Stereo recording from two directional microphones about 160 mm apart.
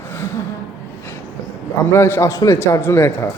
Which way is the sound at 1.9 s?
15° left (ahead or behind).